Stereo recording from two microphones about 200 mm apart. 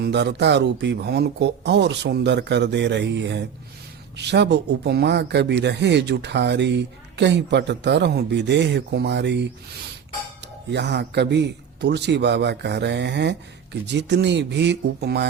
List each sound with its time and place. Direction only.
0.0 s speech: 60° right (ahead or behind)
10.7 s speech: 60° right (ahead or behind)